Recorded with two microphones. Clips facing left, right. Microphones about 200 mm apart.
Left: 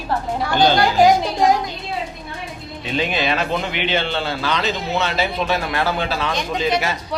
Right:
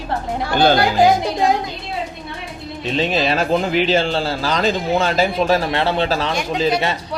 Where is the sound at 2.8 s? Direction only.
30° right (ahead or behind).